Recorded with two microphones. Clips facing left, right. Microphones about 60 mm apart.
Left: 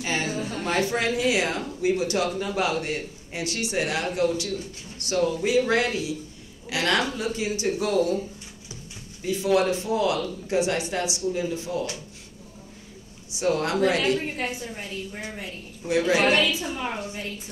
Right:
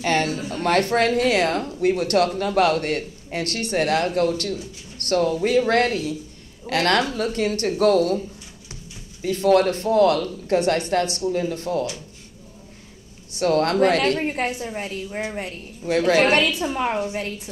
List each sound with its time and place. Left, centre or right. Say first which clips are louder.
0.0 s a woman's voice: right 5 dB; right
9.2 s a woman's voice: right 5 dB; right
13.3 s a woman's voice: right 5 dB; right